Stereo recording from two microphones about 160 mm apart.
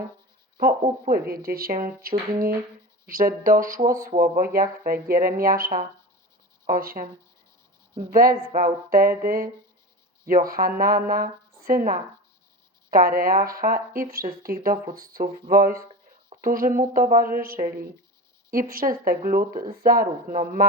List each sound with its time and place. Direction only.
0.5 s speech: 60° right (ahead or behind)
8.1 s speech: 65° right (ahead or behind)